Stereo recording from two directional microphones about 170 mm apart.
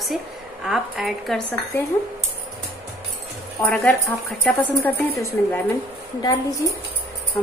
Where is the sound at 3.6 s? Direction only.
15° left (ahead or behind).